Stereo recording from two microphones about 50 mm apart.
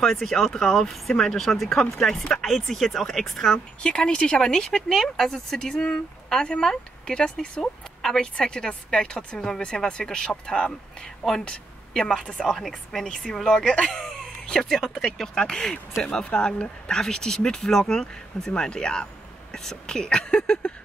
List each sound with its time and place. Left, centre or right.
0.0 s speech: centre
3.5 s speech: centre
5.3 s speech: centre
16.9 s speech: centre